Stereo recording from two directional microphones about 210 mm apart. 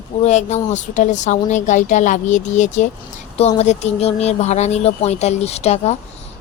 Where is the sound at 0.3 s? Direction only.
35° left (ahead or behind).